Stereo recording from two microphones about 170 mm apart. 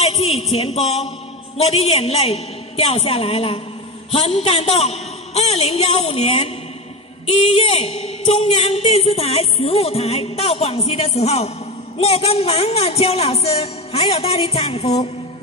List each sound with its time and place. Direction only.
0.0 s music: 35° left (ahead or behind)
1.6 s speech: 40° left (ahead or behind)